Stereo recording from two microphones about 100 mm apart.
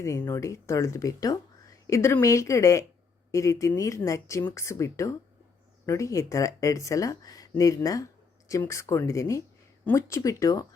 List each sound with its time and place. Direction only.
0.0 s speech: 30° left (ahead or behind)